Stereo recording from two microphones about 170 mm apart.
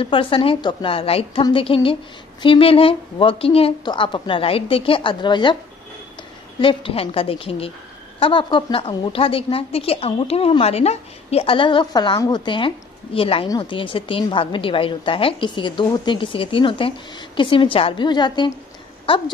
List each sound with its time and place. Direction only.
0.0 s a woman's voice: 30° left (ahead or behind)
6.6 s a woman's voice: 30° left (ahead or behind)